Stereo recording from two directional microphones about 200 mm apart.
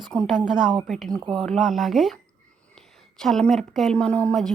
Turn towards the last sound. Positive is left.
turn(degrees=5)  # may be behind; listen again after turning